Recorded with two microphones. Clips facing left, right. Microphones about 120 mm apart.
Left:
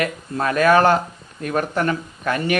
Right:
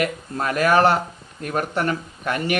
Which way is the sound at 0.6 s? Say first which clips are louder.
Left 2 dB; 30° right (ahead or behind).